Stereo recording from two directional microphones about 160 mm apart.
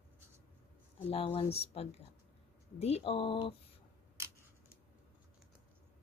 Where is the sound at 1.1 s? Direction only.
35° left (ahead or behind).